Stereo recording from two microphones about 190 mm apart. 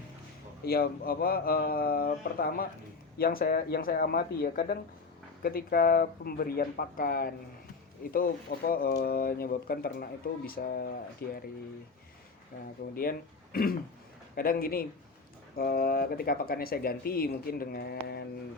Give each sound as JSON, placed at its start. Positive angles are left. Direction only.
{"t": 0.6, "sound": "speech", "side_deg": 55}
{"t": 12.5, "sound": "speech", "side_deg": 45}